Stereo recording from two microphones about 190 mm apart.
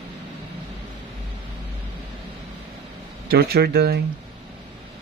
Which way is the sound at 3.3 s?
55° right (ahead or behind).